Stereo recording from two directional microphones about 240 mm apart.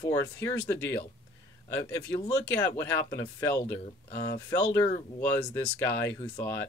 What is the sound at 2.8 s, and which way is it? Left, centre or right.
Speech, centre.